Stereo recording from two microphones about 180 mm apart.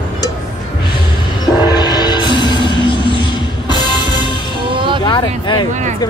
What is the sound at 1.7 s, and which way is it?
Music, 25° left (ahead or behind).